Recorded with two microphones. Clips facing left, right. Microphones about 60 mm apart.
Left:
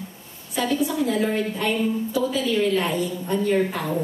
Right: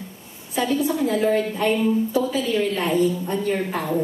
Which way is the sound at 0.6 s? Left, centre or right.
Right.